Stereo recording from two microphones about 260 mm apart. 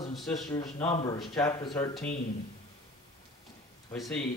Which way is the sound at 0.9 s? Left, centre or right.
Centre.